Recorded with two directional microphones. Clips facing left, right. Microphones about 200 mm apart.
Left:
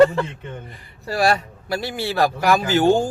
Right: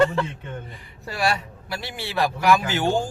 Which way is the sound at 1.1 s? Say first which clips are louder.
Left 5 dB; 40° left (ahead or behind).